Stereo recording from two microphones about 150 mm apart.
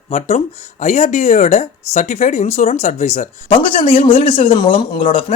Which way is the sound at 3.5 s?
35° left (ahead or behind).